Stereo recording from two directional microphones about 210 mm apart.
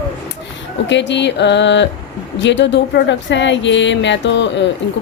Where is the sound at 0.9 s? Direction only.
55° left (ahead or behind).